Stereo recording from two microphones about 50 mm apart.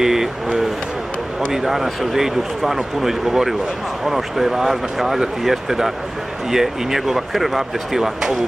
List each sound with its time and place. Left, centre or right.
0.0 s vehicle: centre
1.5 s speech: centre